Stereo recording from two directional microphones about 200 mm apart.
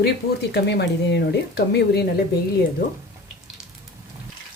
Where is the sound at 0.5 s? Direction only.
55° left (ahead or behind).